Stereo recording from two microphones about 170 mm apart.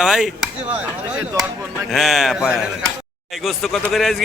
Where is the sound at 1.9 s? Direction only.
Centre (ahead or behind).